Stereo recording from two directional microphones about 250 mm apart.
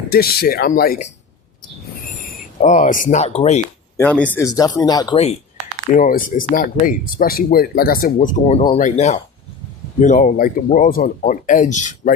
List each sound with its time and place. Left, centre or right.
0.1 s speech: left
3.9 s speech: centre; by 12.1 s left